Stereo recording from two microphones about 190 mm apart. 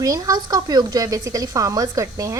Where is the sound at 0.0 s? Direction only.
20° right (ahead or behind).